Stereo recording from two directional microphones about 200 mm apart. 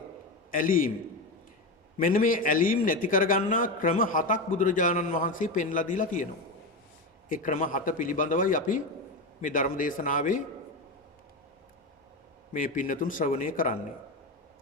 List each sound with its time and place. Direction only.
0.5 s a man's voice: 45° left (ahead or behind)
2.0 s a man's voice: 45° left (ahead or behind)
7.3 s a man's voice: 40° left (ahead or behind)
12.5 s a man's voice: 45° left (ahead or behind)